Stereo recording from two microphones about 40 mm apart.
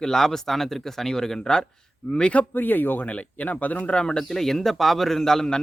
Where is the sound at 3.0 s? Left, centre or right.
Left.